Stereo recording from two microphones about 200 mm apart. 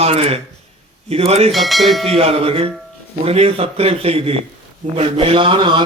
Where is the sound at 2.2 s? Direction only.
30° right (ahead or behind).